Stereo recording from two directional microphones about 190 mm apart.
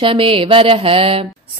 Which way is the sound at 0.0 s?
30° right (ahead or behind).